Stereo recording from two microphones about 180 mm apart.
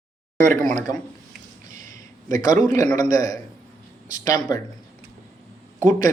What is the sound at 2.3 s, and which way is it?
A man's voice, 20° left (ahead or behind).